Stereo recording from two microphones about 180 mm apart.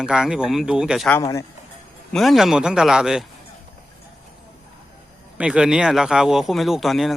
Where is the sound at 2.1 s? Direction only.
Centre (ahead or behind).